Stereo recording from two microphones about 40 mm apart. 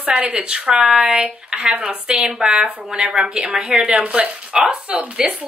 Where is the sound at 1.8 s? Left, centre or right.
Right.